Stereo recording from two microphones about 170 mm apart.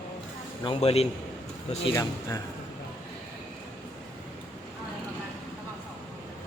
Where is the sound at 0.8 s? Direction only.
35° left (ahead or behind).